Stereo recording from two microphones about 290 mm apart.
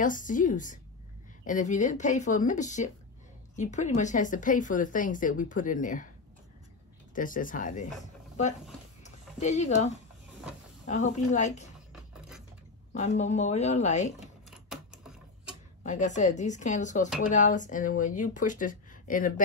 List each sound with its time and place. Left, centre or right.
0.0 s speech: left
7.2 s speech: left
9.0 s a sound: left
10.9 s speech: left
11.9 s a sound: centre
12.9 s speech: left
14.7 s typewriter: centre
15.8 s speech: left